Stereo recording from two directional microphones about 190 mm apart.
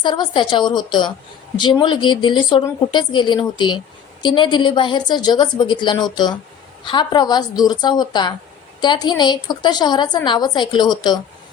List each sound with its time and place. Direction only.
0.0 s a woman's voice: 25° left (ahead or behind)